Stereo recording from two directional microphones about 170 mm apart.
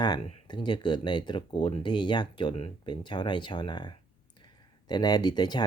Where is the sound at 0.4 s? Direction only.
25° left (ahead or behind).